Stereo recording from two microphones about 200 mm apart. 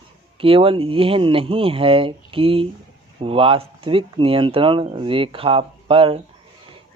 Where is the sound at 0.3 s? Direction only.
25° right (ahead or behind).